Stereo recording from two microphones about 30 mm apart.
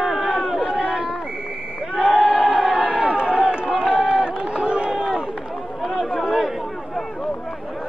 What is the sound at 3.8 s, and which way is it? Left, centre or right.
Run, centre.